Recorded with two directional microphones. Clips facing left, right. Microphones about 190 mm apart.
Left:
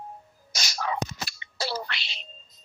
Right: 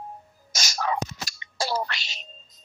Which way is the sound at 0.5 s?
45° right (ahead or behind).